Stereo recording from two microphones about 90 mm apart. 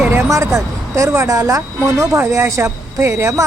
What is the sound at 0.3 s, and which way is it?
Speech, 35° right (ahead or behind).